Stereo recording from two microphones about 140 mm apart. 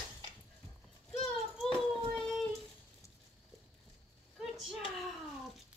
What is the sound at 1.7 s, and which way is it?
Child singing, centre (ahead or behind).